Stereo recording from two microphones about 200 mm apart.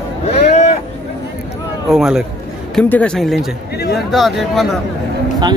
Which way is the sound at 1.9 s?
Centre (ahead or behind).